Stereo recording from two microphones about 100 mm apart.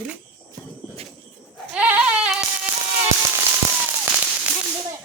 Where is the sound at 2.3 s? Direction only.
5° right (ahead or behind).